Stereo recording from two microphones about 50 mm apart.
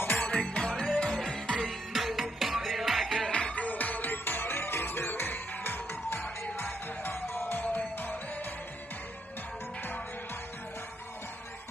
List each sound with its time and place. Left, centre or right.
0.2 s music: left
1.9 s music: centre
3.3 s music: centre
3.5 s music: left
7.6 s music: left